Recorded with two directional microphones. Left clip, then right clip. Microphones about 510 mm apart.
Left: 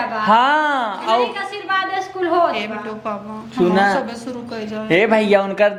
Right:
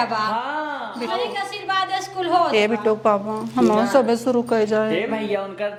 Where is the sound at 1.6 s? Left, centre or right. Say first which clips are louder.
Left 3 dB; right.